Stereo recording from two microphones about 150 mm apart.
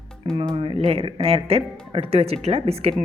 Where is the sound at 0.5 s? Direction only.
40° right (ahead or behind).